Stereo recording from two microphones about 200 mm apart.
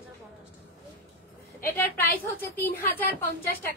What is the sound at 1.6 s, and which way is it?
A woman's voice, 10° left (ahead or behind).